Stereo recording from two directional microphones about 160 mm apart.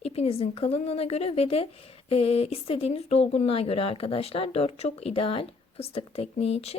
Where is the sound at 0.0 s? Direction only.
40° left (ahead or behind).